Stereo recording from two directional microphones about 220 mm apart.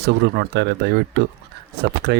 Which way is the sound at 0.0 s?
50° right (ahead or behind).